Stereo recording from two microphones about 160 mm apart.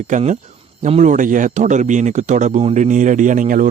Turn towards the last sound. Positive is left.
turn(degrees=-55)  # may be behind; listen again after turning